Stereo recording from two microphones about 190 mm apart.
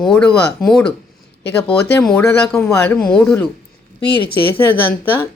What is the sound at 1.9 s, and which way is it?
Speech, 10° left (ahead or behind).